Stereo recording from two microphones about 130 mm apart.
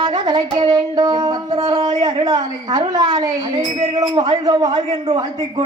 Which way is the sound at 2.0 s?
30° right (ahead or behind).